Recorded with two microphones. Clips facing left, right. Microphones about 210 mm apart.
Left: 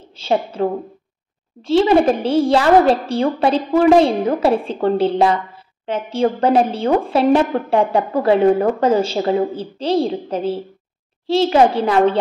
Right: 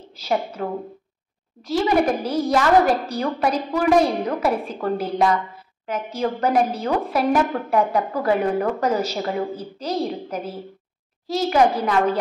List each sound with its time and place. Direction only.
0.1 s a woman's voice: 30° left (ahead or behind)